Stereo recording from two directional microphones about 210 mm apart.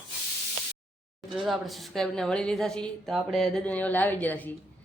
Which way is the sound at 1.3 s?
Centre (ahead or behind).